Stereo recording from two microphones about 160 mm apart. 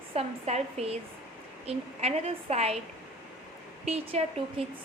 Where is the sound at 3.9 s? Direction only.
40° right (ahead or behind).